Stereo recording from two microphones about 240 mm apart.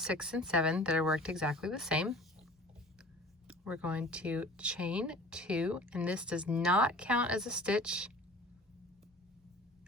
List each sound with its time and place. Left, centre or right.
0.0 s speech: centre
3.4 s speech: centre